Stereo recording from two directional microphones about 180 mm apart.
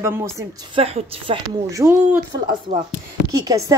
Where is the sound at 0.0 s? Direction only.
15° right (ahead or behind).